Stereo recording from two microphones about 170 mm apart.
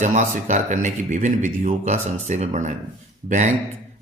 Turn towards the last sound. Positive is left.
turn(degrees=-50)  # may be behind; listen again after turning